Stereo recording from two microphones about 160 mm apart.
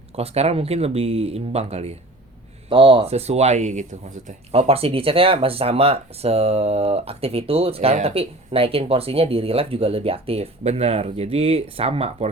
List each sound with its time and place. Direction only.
0.2 s speech: 40° right (ahead or behind)